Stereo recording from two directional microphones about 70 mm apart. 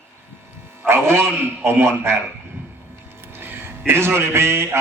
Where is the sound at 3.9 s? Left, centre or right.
Right.